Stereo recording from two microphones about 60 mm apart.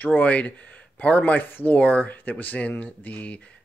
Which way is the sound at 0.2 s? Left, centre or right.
Left.